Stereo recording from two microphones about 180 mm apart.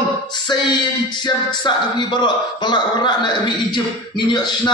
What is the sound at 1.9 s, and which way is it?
A man's voice, 25° left (ahead or behind).